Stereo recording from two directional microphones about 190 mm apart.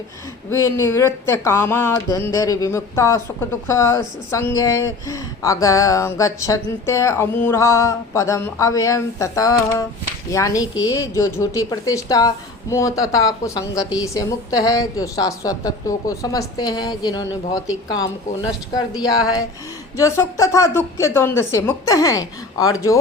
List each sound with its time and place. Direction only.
0.5 s speech: 15° left (ahead or behind)